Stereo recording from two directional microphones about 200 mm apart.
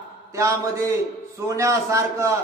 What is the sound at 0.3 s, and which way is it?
A man's voice, 15° right (ahead or behind).